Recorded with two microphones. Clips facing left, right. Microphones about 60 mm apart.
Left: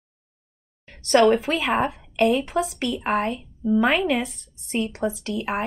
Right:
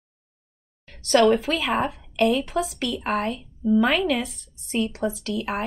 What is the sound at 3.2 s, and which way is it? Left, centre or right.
Speech, centre.